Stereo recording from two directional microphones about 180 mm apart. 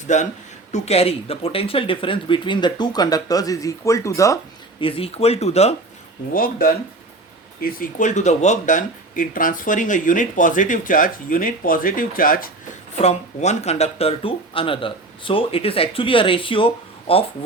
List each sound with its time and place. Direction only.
0.1 s speech: 40° left (ahead or behind); by 4.4 s 15° left (ahead or behind)
4.8 s speech: 30° left (ahead or behind)
6.3 s speech: 55° left (ahead or behind)
13.0 s speech: 35° left (ahead or behind)